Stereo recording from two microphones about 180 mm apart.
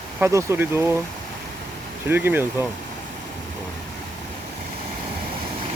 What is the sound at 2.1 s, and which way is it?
Speech, 10° right (ahead or behind).